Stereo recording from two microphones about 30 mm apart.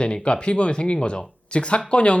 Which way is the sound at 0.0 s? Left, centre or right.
Left.